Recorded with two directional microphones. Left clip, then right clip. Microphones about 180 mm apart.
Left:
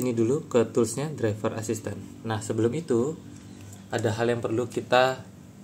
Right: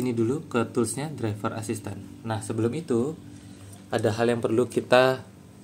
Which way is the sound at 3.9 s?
20° right (ahead or behind).